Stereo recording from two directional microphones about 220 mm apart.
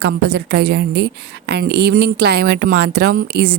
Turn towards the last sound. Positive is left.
turn(degrees=-45)  # may be behind; listen again after turning